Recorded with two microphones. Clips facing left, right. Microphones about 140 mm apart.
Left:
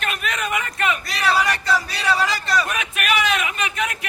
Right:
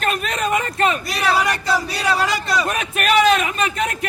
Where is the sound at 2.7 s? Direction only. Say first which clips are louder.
Right 4 dB; 40° right (ahead or behind).